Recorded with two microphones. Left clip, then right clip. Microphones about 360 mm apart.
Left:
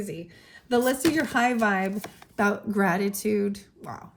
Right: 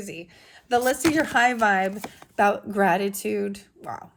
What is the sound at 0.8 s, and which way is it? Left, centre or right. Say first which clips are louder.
A woman's voice: right 2 dB; right.